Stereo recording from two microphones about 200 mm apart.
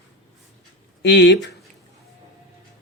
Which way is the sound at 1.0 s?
60° left (ahead or behind).